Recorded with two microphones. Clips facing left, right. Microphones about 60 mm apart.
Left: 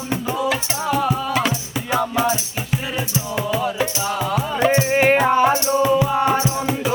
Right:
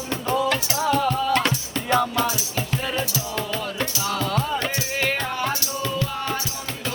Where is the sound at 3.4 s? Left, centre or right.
Centre.